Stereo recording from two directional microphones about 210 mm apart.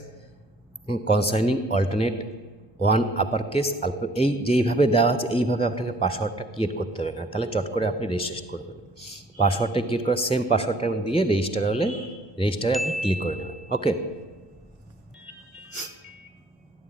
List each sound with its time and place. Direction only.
0.9 s a man's voice: 30° left (ahead or behind)
12.7 s speech: centre (ahead or behind)
13.0 s speech: 30° left (ahead or behind)